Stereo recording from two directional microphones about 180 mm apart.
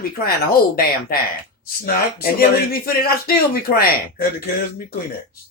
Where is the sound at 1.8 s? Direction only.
55° left (ahead or behind).